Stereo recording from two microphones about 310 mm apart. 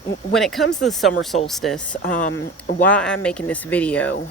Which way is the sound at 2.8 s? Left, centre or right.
Centre.